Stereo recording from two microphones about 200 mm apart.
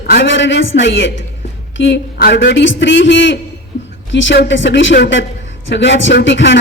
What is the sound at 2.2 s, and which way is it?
A man's voice, 55° left (ahead or behind).